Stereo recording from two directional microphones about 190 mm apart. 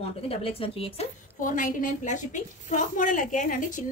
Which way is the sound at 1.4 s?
45° left (ahead or behind).